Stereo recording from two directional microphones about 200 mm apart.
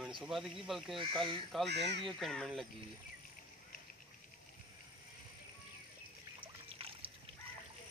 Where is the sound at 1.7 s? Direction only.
60° right (ahead or behind).